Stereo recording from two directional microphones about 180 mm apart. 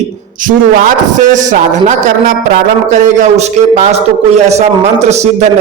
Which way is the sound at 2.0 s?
45° right (ahead or behind).